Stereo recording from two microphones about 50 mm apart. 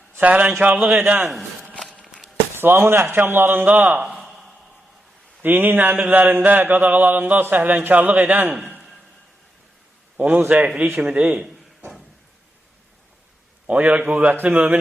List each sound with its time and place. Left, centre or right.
0.2 s a man's voice: right
2.6 s speech: right
3.7 s a man's voice: right
4.0 s a sound: centre
5.4 s a man's voice: right
10.2 s a man's voice: right
13.7 s a man's voice: right